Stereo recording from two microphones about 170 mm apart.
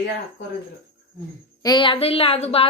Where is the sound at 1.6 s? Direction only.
30° left (ahead or behind).